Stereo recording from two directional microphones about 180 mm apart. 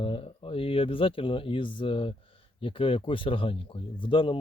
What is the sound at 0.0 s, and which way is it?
Speech, 30° left (ahead or behind).